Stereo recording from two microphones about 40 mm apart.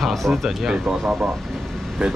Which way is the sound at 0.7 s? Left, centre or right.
Centre.